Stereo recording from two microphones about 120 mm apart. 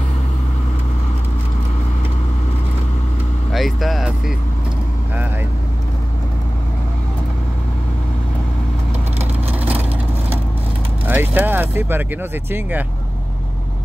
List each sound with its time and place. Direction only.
3.5 s vehicle: centre (ahead or behind)
11.1 s speech: 15° right (ahead or behind)